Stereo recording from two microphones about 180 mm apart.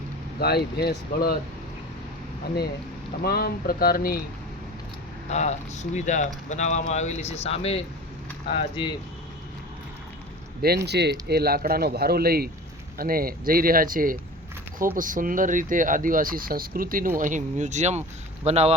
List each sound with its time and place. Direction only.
0.3 s speech: 60° left (ahead or behind)
3.2 s speech: 60° left (ahead or behind)
5.3 s speech: 40° left (ahead or behind)
10.8 s speech: 65° right (ahead or behind); by 18.7 s 35° right (ahead or behind)